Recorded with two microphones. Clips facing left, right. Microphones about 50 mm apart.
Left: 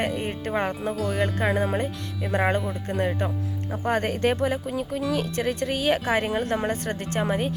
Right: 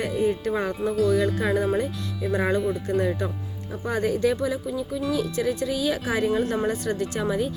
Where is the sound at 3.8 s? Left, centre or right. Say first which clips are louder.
Even; left.